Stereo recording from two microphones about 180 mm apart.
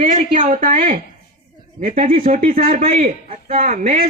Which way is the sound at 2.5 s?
35° right (ahead or behind).